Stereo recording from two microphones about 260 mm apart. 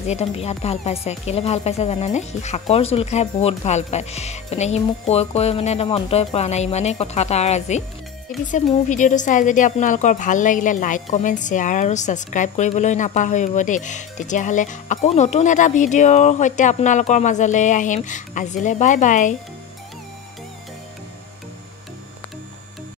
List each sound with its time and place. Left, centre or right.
0.0 s a woman's voice: left